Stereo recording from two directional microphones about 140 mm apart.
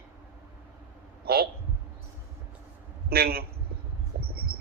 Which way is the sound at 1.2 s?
90° right.